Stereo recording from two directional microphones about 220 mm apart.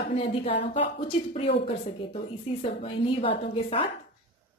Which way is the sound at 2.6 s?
30° left (ahead or behind).